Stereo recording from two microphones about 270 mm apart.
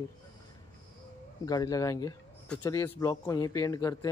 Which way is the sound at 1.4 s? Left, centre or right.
Centre.